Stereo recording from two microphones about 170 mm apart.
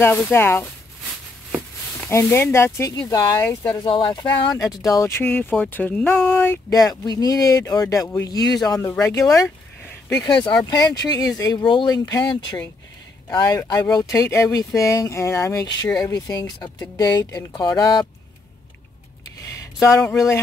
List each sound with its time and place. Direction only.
0.0 s speech: 15° left (ahead or behind)
2.0 s speech: 15° left (ahead or behind)
3.8 s speech: 30° left (ahead or behind)